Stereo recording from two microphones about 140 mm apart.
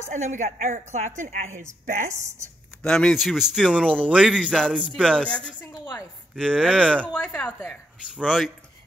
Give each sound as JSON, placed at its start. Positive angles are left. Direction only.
{"t": 0.1, "sound": "a woman's voice", "side_deg": -60}
{"t": 2.8, "sound": "speech", "side_deg": 5}
{"t": 4.6, "sound": "a woman's voice", "side_deg": 5}
{"t": 8.1, "sound": "speech", "side_deg": -5}